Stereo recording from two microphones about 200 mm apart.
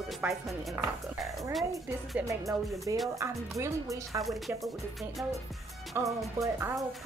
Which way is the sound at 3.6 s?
15° right (ahead or behind).